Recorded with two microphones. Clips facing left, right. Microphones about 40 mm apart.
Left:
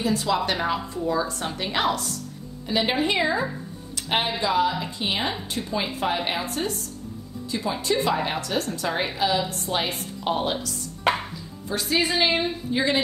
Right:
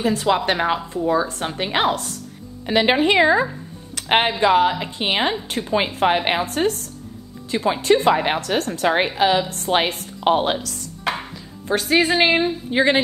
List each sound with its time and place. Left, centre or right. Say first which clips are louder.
0.0 s speech: right 4 dB; right
2.6 s a woman's voice: right 6 dB; right
3.9 s music: right 7 dB; right
4.4 s a woman's voice: right 6 dB; right
10.2 s a woman's voice: right 7 dB; right
11.6 s a woman's voice: right 6 dB; right